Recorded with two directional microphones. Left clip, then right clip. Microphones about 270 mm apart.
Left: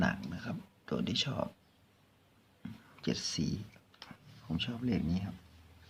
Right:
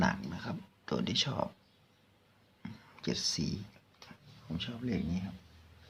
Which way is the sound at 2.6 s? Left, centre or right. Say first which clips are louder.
Even; centre.